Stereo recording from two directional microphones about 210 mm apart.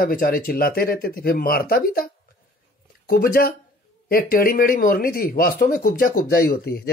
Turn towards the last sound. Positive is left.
turn(degrees=45)  # may be behind; listen again after turning